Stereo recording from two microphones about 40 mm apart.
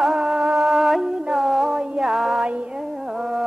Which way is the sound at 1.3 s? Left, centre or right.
Centre.